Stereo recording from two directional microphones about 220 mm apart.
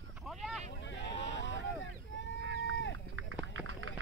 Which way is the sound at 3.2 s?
60° right (ahead or behind).